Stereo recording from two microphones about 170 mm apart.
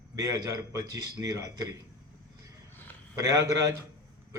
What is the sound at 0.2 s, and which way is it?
A man's voice, 20° right (ahead or behind).